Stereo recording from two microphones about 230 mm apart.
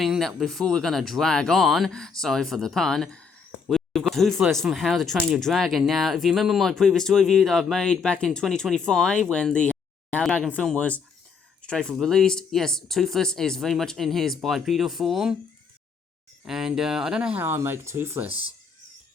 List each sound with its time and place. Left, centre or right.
0.0 s speech: centre
16.4 s speech: centre
18.3 s speech: right